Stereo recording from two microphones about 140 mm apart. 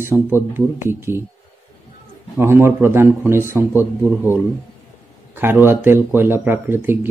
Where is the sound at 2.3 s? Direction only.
15° right (ahead or behind).